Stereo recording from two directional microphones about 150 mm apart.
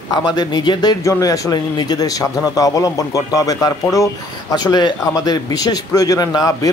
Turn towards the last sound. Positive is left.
turn(degrees=25)  # may be behind; listen again after turning